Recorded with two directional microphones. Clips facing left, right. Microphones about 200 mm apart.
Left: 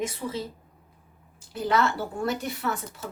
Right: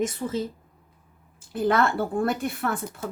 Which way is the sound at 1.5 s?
55° right (ahead or behind).